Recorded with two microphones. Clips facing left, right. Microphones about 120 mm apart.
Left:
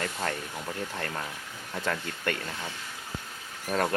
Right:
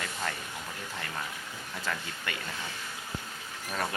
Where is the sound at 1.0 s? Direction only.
50° left (ahead or behind).